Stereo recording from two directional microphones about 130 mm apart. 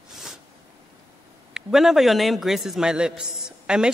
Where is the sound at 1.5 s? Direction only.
Centre (ahead or behind).